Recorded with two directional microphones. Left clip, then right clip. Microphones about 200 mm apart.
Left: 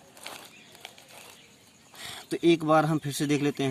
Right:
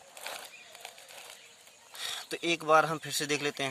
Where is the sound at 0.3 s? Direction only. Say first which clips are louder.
Right 1 dB; centre (ahead or behind).